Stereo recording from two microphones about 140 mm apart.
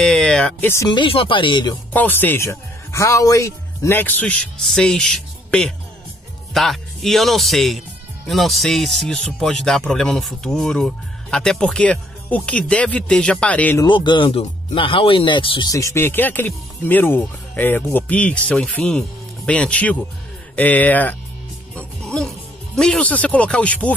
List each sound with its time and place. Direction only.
0.0 s a man's voice: 5° left (ahead or behind)
0.8 s speech: 35° left (ahead or behind)
1.9 s a man's voice: 15° left (ahead or behind)
13.8 s speech: 35° left (ahead or behind)
15.7 s a man's voice: 20° left (ahead or behind)
21.7 s music: 5° left (ahead or behind)
22.8 s a man's voice: 5° left (ahead or behind)